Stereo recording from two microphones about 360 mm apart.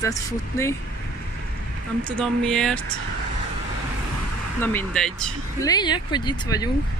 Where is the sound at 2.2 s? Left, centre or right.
Centre.